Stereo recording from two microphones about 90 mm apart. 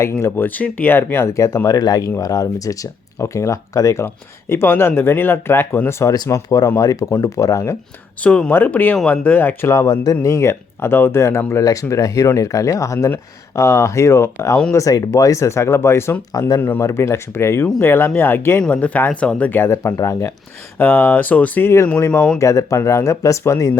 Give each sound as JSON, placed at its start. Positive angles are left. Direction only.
{"t": 0.0, "sound": "speech", "side_deg": 30}
{"t": 0.4, "sound": "speech", "side_deg": 20}
{"t": 1.3, "sound": "speech", "side_deg": 35}
{"t": 8.2, "sound": "speech", "side_deg": 15}
{"t": 20.7, "sound": "speech", "side_deg": 20}
{"t": 22.4, "sound": "speech", "side_deg": 35}